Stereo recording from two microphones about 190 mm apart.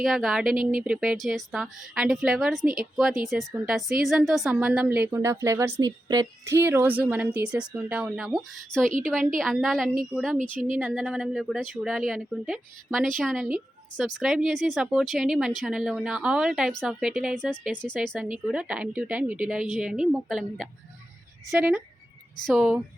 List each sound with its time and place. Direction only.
0.0 s a woman's voice: centre (ahead or behind)
0.6 s speech: 50° right (ahead or behind)
0.9 s a woman's voice: centre (ahead or behind)